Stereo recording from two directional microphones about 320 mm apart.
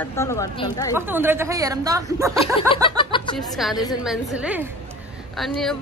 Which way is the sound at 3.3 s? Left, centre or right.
Centre.